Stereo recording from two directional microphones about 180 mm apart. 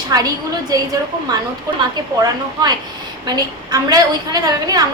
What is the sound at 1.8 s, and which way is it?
A woman's voice, 25° right (ahead or behind).